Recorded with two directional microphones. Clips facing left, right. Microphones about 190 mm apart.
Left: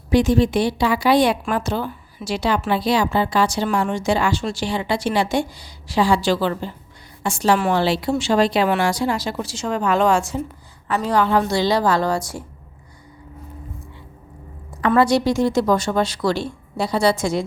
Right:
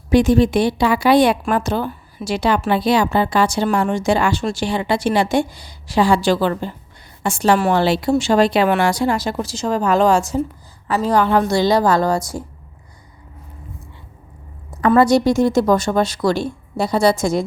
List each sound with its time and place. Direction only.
0.1 s a woman's voice: 50° right (ahead or behind)
14.8 s a woman's voice: 45° right (ahead or behind)